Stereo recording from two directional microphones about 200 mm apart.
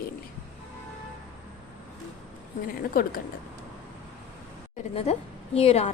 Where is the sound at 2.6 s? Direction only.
45° left (ahead or behind).